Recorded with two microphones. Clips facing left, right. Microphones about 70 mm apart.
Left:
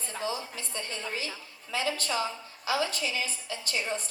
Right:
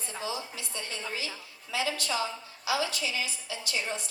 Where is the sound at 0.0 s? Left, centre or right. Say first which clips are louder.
Left 2 dB; left.